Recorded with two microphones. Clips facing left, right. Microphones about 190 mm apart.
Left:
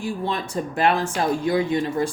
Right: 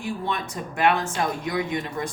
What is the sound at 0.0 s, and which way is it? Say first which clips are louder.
Speech: left 2 dB; 30° left (ahead or behind).